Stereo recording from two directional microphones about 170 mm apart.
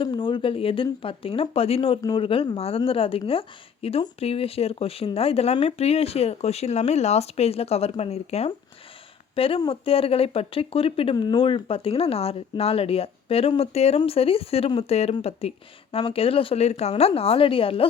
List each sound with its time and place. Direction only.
0.0 s speech: 30° left (ahead or behind)